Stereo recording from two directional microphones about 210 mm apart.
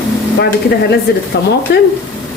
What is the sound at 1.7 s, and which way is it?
Speech, 50° left (ahead or behind).